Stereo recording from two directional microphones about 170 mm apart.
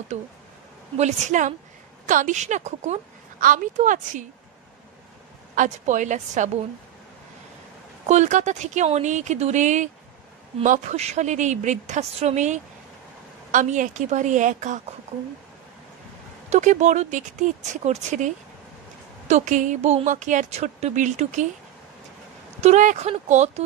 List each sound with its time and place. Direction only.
0.1 s a woman's voice: 45° right (ahead or behind)
5.6 s a woman's voice: 45° right (ahead or behind)
8.1 s a woman's voice: 45° right (ahead or behind)
16.4 s a woman's voice: 45° right (ahead or behind)
22.6 s speech: 45° right (ahead or behind)